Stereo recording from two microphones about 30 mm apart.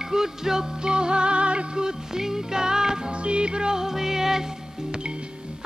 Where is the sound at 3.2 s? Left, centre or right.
Right; by 4.4 s centre.